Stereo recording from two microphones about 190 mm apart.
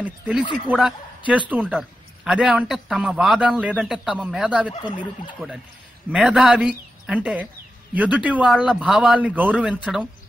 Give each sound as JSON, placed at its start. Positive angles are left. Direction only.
{"t": 0.0, "sound": "a man's voice", "side_deg": -10}
{"t": 4.8, "sound": "speech", "side_deg": 25}
{"t": 6.1, "sound": "a man's voice", "side_deg": 0}